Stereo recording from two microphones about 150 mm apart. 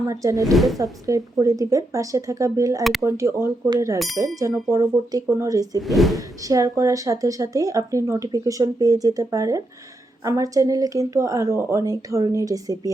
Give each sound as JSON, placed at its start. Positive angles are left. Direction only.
{"t": 0.1, "sound": "speech", "side_deg": -20}
{"t": 0.5, "sound": "speech", "side_deg": 0}
{"t": 0.8, "sound": "speech", "side_deg": -20}
{"t": 3.9, "sound": "speech", "side_deg": 0}
{"t": 4.7, "sound": "speech", "side_deg": -20}
{"t": 5.9, "sound": "speech", "side_deg": 0}
{"t": 6.1, "sound": "speech", "side_deg": -20}